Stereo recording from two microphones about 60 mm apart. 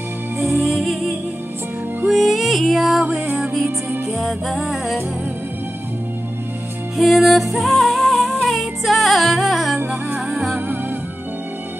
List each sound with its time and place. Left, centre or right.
0.6 s music: centre
4.1 s music: centre
7.0 s music: centre
9.8 s music: right